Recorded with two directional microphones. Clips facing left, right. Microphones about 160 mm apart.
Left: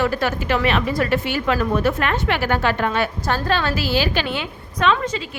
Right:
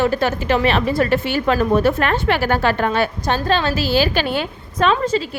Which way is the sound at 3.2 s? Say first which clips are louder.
Right 2 dB; 25° right (ahead or behind).